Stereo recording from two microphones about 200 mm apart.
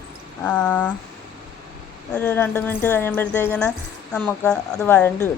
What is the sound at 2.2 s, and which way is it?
Speech, 10° left (ahead or behind).